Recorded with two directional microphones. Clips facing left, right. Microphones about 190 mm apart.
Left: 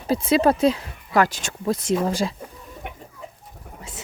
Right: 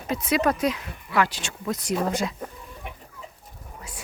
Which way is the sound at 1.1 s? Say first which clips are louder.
Left 4 dB; 45° left (ahead or behind).